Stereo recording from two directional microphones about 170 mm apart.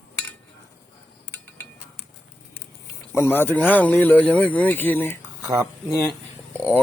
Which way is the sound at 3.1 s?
15° left (ahead or behind).